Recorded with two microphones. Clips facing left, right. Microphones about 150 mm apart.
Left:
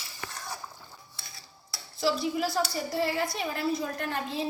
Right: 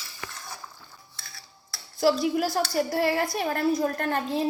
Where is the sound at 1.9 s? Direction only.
60° right (ahead or behind).